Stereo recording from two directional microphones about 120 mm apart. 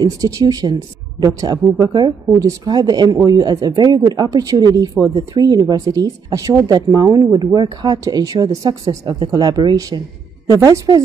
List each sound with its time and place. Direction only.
0.0 s speech: 30° right (ahead or behind)